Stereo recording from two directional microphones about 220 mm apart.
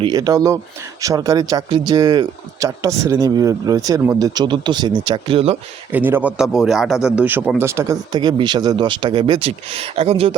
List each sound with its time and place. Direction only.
0.0 s speech: 15° right (ahead or behind)
5.9 s a man's voice: 10° right (ahead or behind); by 10.3 s 25° right (ahead or behind)